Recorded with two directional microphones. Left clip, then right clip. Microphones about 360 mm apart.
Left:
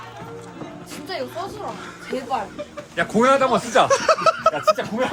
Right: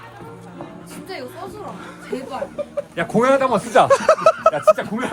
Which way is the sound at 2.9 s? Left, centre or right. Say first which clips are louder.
Even; centre.